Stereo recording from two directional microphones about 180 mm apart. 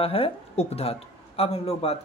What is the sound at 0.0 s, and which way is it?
Speech, 30° left (ahead or behind).